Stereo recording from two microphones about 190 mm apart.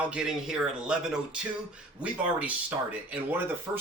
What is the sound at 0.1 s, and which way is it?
Speech, 5° right (ahead or behind).